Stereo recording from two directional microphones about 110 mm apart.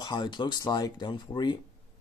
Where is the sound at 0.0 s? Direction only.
40° left (ahead or behind).